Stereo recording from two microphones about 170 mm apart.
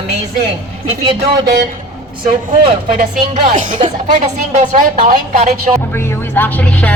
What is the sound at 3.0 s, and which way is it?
Speech, 55° right (ahead or behind).